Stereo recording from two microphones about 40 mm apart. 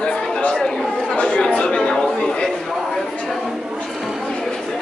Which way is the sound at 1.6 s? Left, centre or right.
Left.